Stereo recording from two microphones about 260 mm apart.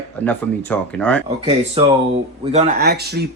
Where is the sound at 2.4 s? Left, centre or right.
Right.